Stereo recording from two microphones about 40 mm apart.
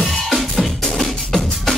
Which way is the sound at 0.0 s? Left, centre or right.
Centre.